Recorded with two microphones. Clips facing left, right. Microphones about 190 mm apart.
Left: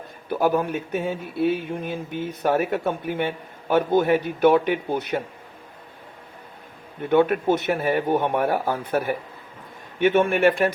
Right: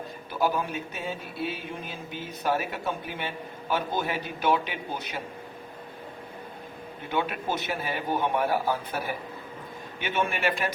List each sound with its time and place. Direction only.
0.3 s speech: 55° left (ahead or behind)
7.1 s speech: 55° left (ahead or behind)
10.0 s speech: 55° left (ahead or behind)